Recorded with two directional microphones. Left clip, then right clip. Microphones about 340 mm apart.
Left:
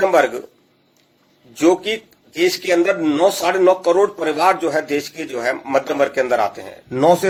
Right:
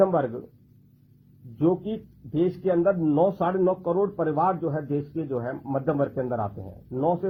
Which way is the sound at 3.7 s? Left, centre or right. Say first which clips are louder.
Left 10 dB; left.